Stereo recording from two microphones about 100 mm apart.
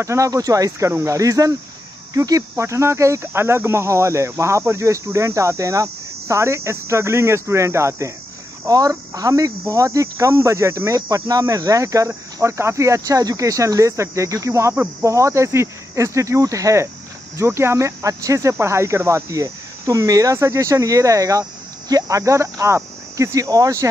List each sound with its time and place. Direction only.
0.0 s speech: 30° right (ahead or behind)